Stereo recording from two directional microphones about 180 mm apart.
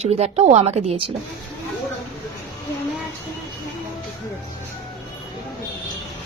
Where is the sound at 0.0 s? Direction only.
35° right (ahead or behind).